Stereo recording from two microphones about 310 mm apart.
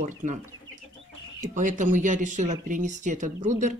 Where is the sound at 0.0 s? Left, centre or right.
Right.